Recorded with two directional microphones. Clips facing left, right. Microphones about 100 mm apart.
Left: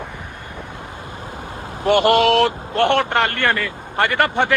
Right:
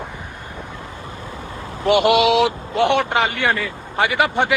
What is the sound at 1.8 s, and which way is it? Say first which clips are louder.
Speech: even; 55° left (ahead or behind).